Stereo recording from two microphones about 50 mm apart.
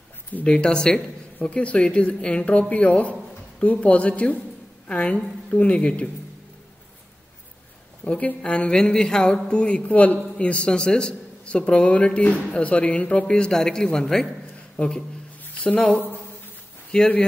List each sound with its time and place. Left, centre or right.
0.3 s a man's voice: left
8.0 s a woman's voice: left
13.3 s speech: centre
14.8 s a man's voice: left
15.4 s a sound: left
16.9 s speech: centre